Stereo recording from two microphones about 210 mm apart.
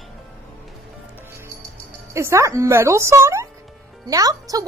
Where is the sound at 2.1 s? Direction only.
15° right (ahead or behind).